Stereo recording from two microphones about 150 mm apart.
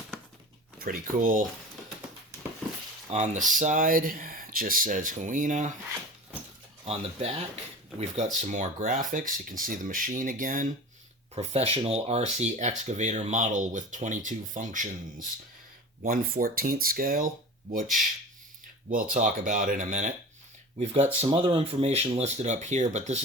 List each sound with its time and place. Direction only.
0.8 s speech: 70° right (ahead or behind)
3.1 s speech: 55° right (ahead or behind)
6.8 s speech: 45° right (ahead or behind); by 10.7 s 60° right (ahead or behind)
11.3 s speech: 45° right (ahead or behind); by 15.3 s 60° right (ahead or behind)
16.0 s speech: 70° right (ahead or behind)
18.9 s speech: 65° right (ahead or behind); by 23.2 s 50° right (ahead or behind)